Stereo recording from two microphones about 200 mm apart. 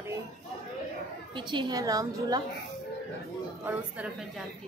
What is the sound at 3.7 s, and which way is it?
Speech, 5° right (ahead or behind).